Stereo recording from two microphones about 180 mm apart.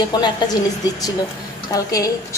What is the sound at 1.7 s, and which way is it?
Speech, 20° left (ahead or behind).